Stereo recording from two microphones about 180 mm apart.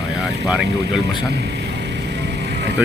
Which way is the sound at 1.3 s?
70° right (ahead or behind).